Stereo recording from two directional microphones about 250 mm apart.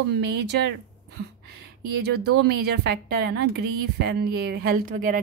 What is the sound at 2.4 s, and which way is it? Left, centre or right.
Speech, right.